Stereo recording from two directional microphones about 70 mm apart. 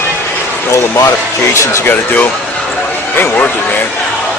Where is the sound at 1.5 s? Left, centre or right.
Left.